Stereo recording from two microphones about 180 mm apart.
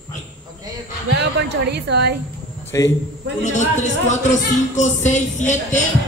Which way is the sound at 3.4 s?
40° left (ahead or behind).